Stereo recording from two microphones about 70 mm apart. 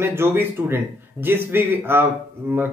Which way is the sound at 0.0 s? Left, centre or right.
Right.